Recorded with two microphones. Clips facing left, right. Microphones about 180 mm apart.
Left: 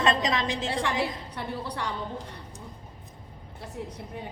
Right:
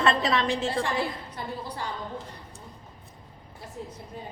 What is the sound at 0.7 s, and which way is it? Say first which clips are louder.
A woman's voice: even; 70° left (ahead or behind).